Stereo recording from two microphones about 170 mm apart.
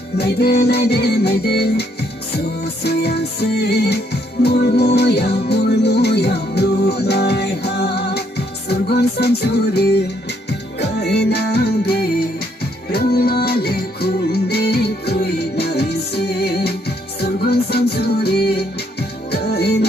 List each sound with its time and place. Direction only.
0.2 s music: 70° left (ahead or behind)